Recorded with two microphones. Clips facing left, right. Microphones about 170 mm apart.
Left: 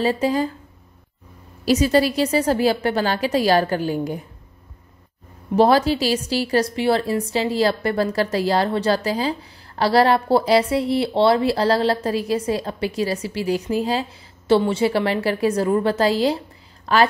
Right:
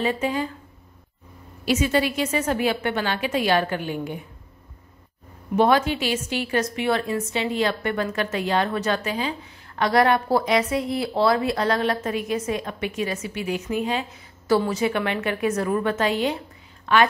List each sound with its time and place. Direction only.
0.0 s a woman's voice: 35° left (ahead or behind)
1.6 s a woman's voice: 35° left (ahead or behind)
5.6 s a woman's voice: 35° left (ahead or behind)